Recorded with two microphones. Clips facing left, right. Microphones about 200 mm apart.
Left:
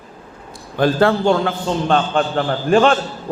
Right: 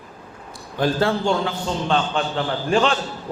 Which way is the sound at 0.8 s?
60° left (ahead or behind).